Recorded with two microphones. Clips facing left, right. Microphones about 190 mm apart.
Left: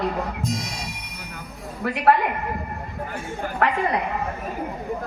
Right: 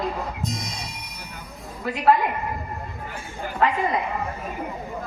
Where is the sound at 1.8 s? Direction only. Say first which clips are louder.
Even; 65° left (ahead or behind).